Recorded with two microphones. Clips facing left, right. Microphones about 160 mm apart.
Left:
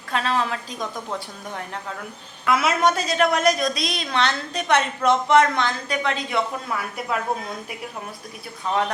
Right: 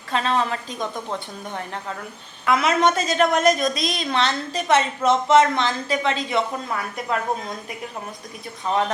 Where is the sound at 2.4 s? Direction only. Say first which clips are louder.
Right 1 dB; 5° left (ahead or behind).